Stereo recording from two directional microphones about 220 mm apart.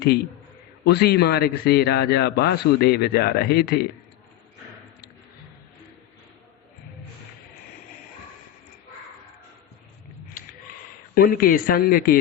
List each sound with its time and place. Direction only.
0.9 s a man's voice: 45° left (ahead or behind)
10.4 s a sound: 40° left (ahead or behind)
11.1 s speech: 40° left (ahead or behind)